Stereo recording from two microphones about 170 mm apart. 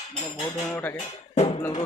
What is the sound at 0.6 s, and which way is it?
Speech, 10° left (ahead or behind).